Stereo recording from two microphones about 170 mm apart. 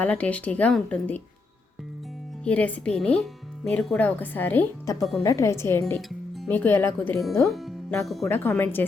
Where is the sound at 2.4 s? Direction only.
10° left (ahead or behind).